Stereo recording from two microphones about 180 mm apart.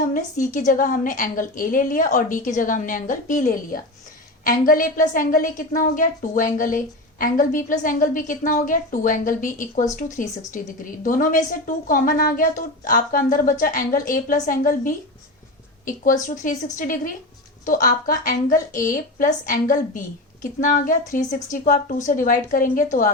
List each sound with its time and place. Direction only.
0.1 s a woman's voice: 45° left (ahead or behind)